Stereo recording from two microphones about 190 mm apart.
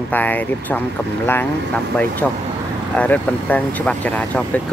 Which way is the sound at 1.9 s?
5° left (ahead or behind).